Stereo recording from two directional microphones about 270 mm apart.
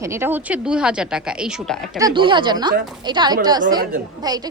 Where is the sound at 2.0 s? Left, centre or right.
Centre.